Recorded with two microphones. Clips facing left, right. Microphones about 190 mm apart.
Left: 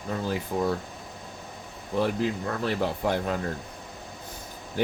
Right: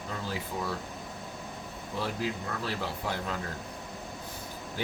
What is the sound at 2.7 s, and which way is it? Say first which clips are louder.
Mantra: left 9 dB; 55° left (ahead or behind).